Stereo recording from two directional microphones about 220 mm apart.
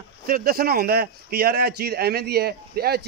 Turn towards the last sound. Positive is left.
turn(degrees=-45)  # may be behind; listen again after turning